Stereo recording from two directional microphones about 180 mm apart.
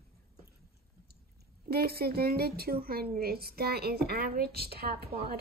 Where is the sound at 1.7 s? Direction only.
60° right (ahead or behind).